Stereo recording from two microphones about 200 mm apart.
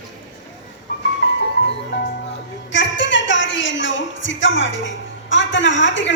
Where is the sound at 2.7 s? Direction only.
65° left (ahead or behind).